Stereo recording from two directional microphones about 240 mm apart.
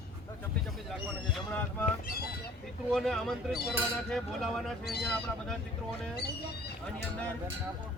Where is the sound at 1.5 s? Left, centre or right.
Centre.